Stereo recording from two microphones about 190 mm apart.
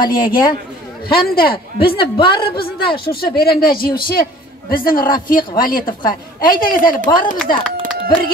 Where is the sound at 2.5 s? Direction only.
55° left (ahead or behind).